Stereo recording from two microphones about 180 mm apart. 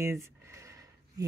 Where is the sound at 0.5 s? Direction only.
15° right (ahead or behind).